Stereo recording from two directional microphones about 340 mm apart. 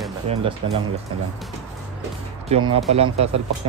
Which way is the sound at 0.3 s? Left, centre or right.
Centre.